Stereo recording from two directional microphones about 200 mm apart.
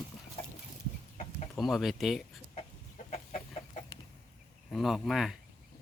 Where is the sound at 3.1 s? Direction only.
35° left (ahead or behind).